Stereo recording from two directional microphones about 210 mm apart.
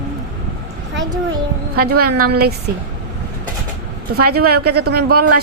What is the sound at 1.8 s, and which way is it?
Speech, 45° right (ahead or behind).